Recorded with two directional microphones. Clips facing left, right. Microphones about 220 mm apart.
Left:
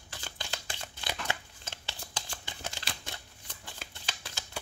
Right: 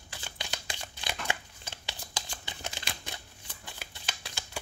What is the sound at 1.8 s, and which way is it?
Shuffling cards, 15° right (ahead or behind).